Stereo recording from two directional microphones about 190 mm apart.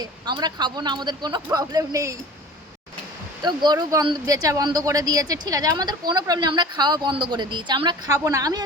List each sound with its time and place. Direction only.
0.0 s speech: 20° right (ahead or behind)
3.4 s speech: 20° right (ahead or behind)